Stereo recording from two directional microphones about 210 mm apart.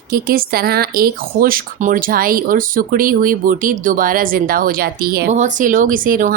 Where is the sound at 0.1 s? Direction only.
45° right (ahead or behind).